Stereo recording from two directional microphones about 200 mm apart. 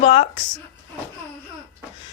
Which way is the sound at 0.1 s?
25° left (ahead or behind).